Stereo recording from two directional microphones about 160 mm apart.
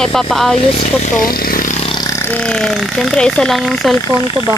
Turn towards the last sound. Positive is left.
turn(degrees=25)  # may be behind; listen again after turning